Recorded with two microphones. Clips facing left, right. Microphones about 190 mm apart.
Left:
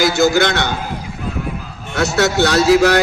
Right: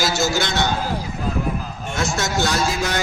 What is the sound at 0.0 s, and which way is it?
Speech, 55° left (ahead or behind).